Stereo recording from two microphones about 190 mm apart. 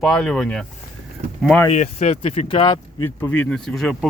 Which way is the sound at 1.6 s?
35° left (ahead or behind).